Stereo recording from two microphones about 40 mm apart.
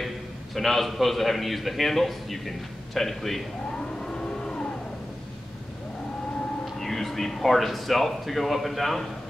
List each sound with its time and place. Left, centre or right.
0.6 s a man's voice: centre
3.7 s vehicle: left
6.6 s speech: centre